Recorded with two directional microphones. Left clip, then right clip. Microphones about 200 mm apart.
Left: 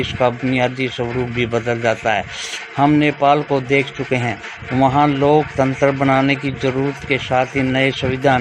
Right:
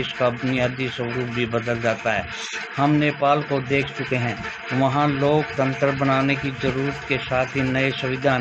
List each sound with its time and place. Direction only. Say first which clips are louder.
0.0 s a man's voice: left 4 dB; 50° left (ahead or behind)